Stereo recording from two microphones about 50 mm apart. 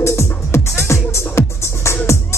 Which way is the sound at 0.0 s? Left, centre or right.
Left.